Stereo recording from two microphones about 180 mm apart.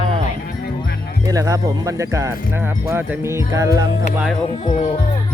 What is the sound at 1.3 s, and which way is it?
Speech, 20° right (ahead or behind).